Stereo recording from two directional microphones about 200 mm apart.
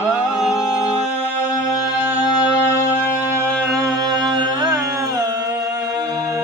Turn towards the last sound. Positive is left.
turn(degrees=-15)  # may be behind; listen again after turning